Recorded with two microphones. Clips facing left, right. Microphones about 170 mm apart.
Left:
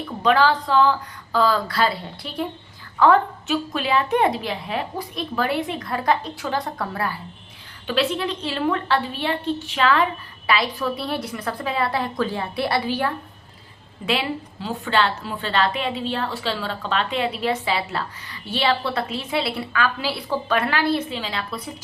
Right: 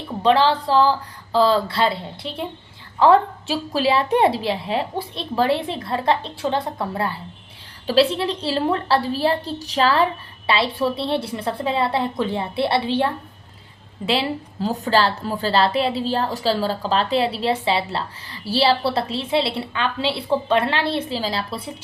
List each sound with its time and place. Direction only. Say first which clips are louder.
0.2 s a woman's voice: right 2 dB; 30° right (ahead or behind)